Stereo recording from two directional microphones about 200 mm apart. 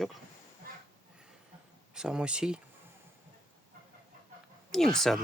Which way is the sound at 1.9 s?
5° right (ahead or behind).